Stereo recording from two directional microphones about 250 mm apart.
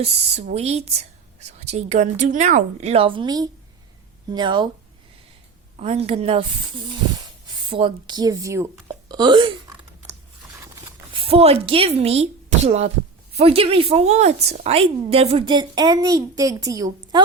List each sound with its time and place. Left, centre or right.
0.0 s a woman's voice: right
5.7 s a woman's voice: right
11.1 s a woman's voice: right